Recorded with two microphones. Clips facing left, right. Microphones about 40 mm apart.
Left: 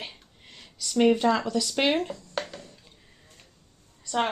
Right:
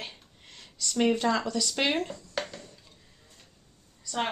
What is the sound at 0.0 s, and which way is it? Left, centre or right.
Speech, centre.